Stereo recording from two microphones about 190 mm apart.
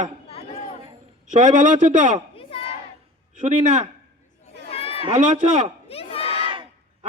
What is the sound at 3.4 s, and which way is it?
Speech, 40° right (ahead or behind).